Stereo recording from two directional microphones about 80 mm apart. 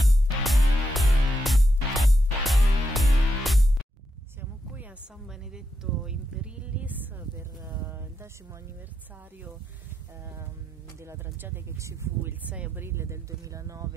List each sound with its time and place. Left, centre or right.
0.4 s music: centre
4.4 s a sound: right
5.2 s a sound: centre; by 8.5 s right
10.2 s music: right
11.0 s speech: right
12.5 s speech: centre
12.8 s speech: right